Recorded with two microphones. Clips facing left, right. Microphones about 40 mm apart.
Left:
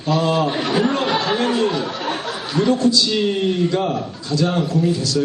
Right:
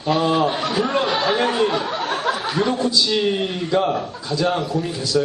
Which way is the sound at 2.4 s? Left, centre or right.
Centre.